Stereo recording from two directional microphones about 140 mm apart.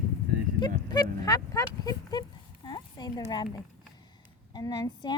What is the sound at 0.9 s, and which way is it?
Speech, 25° left (ahead or behind).